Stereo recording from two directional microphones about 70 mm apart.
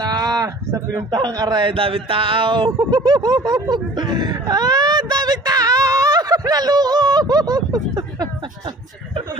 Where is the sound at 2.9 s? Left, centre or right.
Right.